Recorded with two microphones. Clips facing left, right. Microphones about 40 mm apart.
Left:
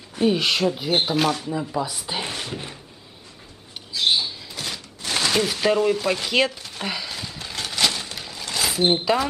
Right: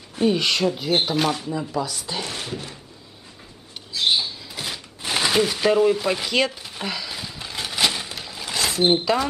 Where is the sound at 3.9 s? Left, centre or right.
Centre.